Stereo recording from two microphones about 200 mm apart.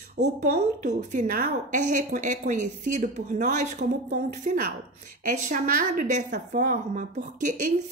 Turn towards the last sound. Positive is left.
turn(degrees=-40)  # may be behind; listen again after turning